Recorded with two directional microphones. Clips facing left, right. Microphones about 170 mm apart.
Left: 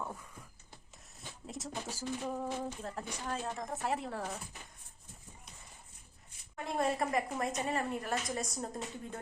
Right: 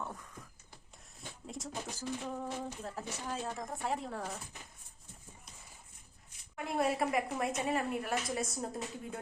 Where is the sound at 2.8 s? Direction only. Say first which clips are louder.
Left 1 dB; 5° right (ahead or behind).